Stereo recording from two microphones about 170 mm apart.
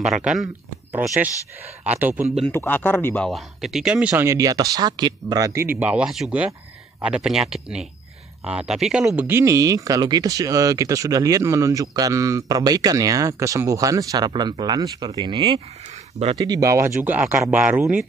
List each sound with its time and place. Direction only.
0.0 s speech: centre (ahead or behind)
1.9 s speech: 10° right (ahead or behind)
2.5 s a man's voice: 10° left (ahead or behind)
3.3 s speech: centre (ahead or behind); by 5.7 s 20° right (ahead or behind)
5.8 s speech: 5° right (ahead or behind)